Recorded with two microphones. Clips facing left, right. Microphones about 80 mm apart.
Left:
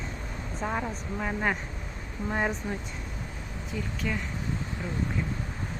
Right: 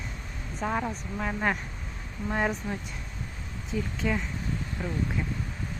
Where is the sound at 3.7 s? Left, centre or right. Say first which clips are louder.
Right 3 dB; right.